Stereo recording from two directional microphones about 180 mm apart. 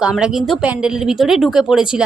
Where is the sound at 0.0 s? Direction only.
5° right (ahead or behind).